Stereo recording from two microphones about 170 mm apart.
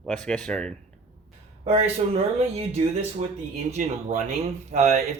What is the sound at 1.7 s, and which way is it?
Speech, 35° right (ahead or behind).